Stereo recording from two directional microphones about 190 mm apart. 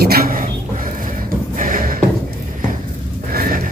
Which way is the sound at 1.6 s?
45° right (ahead or behind).